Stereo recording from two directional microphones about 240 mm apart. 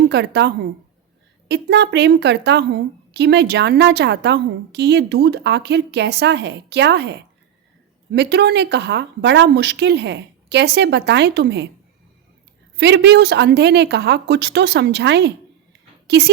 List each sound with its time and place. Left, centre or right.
0.1 s a woman's voice: right
12.7 s a woman's voice: right